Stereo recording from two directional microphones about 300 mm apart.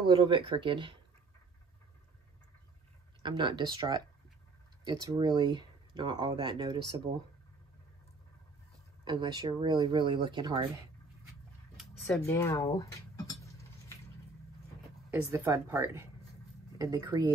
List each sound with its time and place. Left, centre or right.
0.0 s speech: centre
3.2 s speech: centre
9.0 s speech: centre
11.8 s speech: centre
13.3 s a sound: centre
15.0 s speech: centre